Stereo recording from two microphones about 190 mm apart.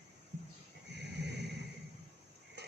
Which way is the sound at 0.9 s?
60° right (ahead or behind).